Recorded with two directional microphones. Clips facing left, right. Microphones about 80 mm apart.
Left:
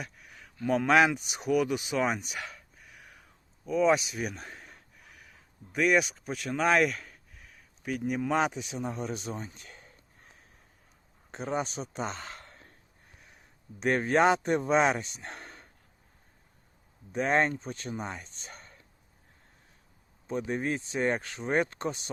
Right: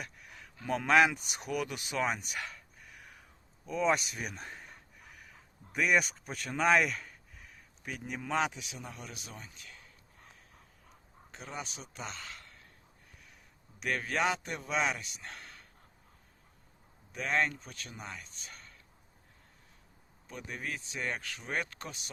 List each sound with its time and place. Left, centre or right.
0.0 s speech: centre
3.7 s a sound: centre
8.4 s speech: left
11.3 s a man's voice: left
13.7 s speech: left
17.1 s speech: left
20.2 s speech: left